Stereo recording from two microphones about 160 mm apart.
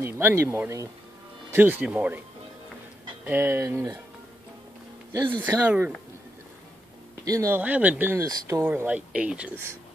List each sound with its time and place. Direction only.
0.0 s speech: 15° right (ahead or behind)
3.3 s speech: 15° right (ahead or behind)
5.1 s speech: 30° right (ahead or behind)
5.4 s speech: 10° right (ahead or behind)
7.2 s speech: 20° right (ahead or behind)
8.6 s speech: 10° right (ahead or behind)